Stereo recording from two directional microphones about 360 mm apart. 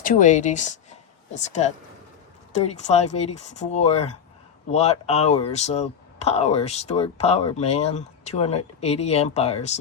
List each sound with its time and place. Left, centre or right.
0.0 s speech: left